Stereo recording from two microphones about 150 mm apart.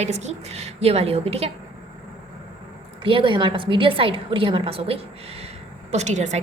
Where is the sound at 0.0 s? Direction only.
50° right (ahead or behind).